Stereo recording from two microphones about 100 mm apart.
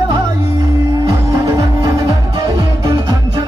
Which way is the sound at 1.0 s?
35° right (ahead or behind).